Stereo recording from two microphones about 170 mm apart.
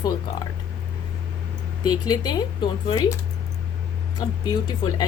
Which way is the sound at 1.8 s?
25° left (ahead or behind).